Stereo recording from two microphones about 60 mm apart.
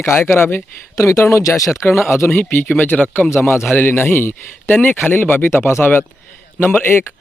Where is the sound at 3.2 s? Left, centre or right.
Left.